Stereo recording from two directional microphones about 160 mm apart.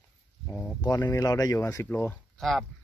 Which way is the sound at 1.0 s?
20° left (ahead or behind).